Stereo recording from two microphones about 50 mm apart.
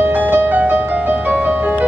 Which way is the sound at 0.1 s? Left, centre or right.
Right.